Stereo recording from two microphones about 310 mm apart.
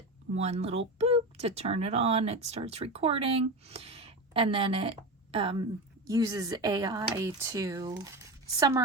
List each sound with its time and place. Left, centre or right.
0.3 s speech: right